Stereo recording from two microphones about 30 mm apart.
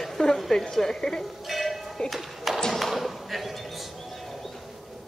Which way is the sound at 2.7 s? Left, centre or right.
Centre.